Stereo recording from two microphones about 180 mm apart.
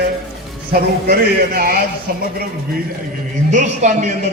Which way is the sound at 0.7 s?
55° right (ahead or behind).